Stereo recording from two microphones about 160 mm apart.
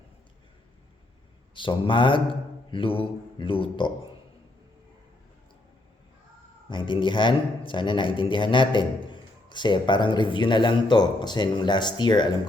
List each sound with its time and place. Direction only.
1.5 s speech: 30° left (ahead or behind)
6.7 s a man's voice: 30° left (ahead or behind)